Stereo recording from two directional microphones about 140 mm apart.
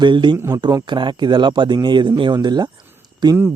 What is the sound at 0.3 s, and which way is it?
Speech, 15° right (ahead or behind).